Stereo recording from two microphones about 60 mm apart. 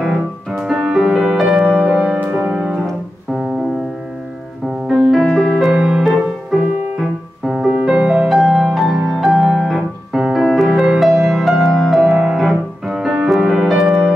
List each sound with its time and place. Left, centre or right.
0.0 s music: centre
4.8 s music: centre
5.2 s music: centre
10.1 s piano: centre
10.4 s music: centre